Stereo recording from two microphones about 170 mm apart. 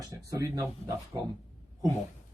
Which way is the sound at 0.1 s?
20° right (ahead or behind).